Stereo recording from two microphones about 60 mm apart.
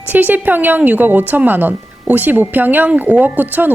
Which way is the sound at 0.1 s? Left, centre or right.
Right.